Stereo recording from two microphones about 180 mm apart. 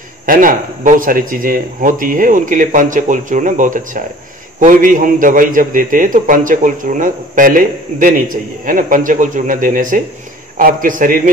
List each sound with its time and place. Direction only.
0.3 s speech: 50° right (ahead or behind)